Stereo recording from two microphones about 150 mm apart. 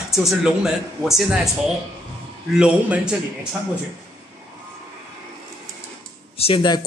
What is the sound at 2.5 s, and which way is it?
Speech, 5° right (ahead or behind).